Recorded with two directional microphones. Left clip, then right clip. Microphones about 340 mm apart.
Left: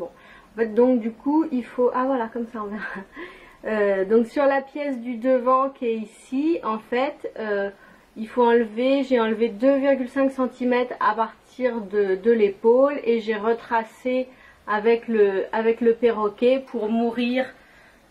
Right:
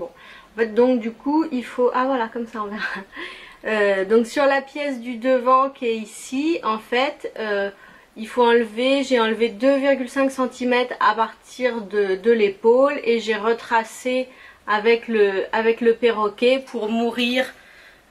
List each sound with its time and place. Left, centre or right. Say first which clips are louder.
0.6 s speech: right 1 dB; centre
1.2 s speech: right 1 dB; centre